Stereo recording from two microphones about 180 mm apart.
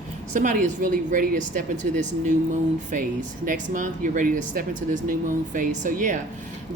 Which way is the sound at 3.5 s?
45° right (ahead or behind).